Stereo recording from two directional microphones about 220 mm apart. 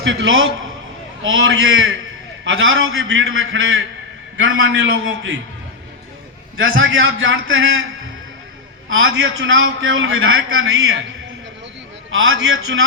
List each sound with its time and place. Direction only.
0.0 s a man's voice: 60° right (ahead or behind)
6.6 s a man's voice: 60° right (ahead or behind)
8.9 s a man's voice: 65° right (ahead or behind)
12.1 s a man's voice: 65° right (ahead or behind)